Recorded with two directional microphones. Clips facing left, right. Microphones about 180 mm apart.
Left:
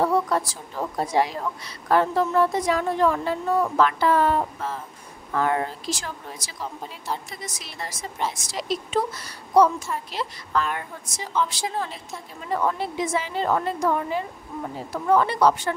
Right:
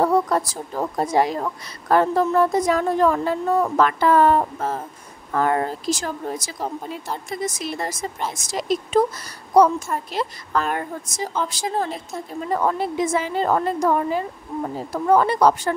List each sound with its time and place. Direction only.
0.6 s a woman's voice: 45° right (ahead or behind)